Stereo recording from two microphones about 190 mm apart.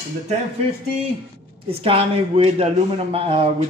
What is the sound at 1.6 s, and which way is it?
Speech, 30° right (ahead or behind).